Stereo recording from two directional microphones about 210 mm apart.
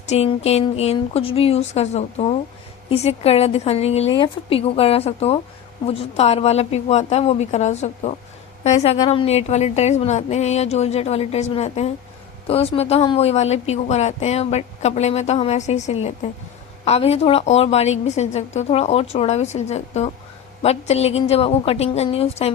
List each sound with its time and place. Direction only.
0.0 s a woman's voice: 30° left (ahead or behind)